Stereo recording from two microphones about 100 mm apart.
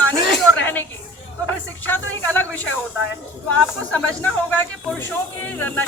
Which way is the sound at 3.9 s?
15° left (ahead or behind).